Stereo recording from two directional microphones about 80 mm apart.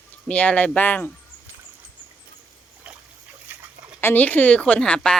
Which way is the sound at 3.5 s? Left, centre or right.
Right.